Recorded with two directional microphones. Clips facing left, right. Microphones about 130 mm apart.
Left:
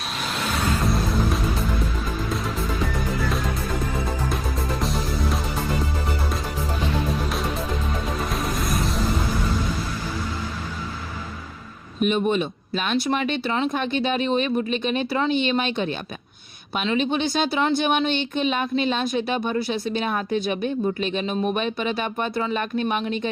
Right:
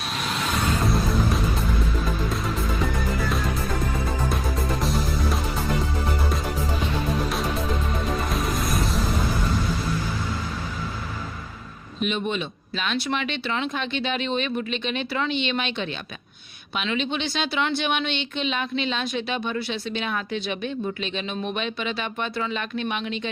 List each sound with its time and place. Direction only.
0.1 s music: centre (ahead or behind)
4.8 s music: centre (ahead or behind)
8.2 s music: centre (ahead or behind)
11.9 s speech: 45° left (ahead or behind)